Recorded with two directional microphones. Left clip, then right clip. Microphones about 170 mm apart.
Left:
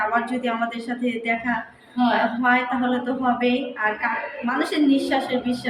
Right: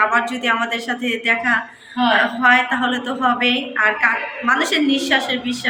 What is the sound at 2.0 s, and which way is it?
Speech, 10° right (ahead or behind).